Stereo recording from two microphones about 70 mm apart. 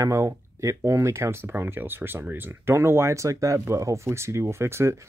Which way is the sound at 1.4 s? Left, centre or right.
Right.